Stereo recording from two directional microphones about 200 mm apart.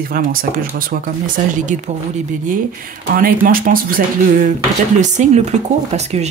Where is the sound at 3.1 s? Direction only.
45° right (ahead or behind).